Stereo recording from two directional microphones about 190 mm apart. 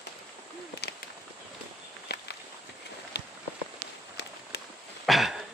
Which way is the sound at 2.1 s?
55° left (ahead or behind).